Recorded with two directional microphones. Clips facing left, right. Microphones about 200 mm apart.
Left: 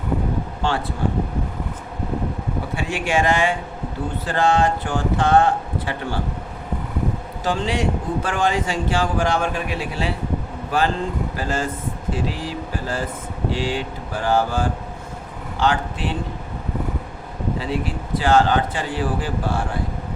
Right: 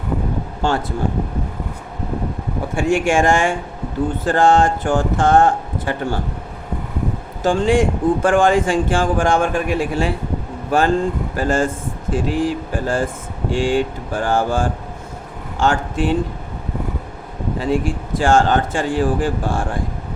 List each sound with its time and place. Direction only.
0.6 s speech: 45° right (ahead or behind)
2.7 s speech: 45° right (ahead or behind)
7.4 s speech: 50° right (ahead or behind)
17.6 s speech: 45° right (ahead or behind)